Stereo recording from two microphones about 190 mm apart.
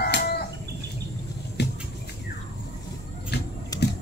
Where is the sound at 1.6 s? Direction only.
60° left (ahead or behind).